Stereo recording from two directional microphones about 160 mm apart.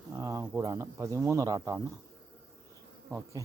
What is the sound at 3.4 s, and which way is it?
Speech, 20° right (ahead or behind).